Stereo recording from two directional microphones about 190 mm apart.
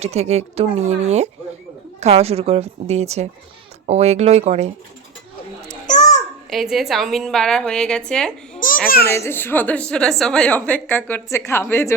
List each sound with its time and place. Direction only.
0.0 s speech: 35° right (ahead or behind)
5.8 s babbling: 40° left (ahead or behind)
6.5 s a woman's voice: centre (ahead or behind)
8.5 s a sound: 45° left (ahead or behind)
9.0 s a woman's voice: 15° left (ahead or behind)